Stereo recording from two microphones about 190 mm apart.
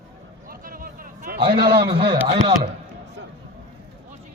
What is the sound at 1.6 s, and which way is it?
Speech, 55° right (ahead or behind).